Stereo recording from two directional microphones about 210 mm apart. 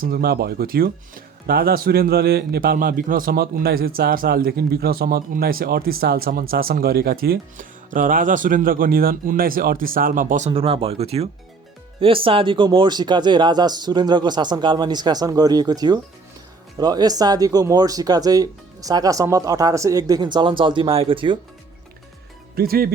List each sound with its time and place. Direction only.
0.0 s speech: 45° right (ahead or behind); by 21.3 s 25° right (ahead or behind)
22.5 s speech: 45° right (ahead or behind)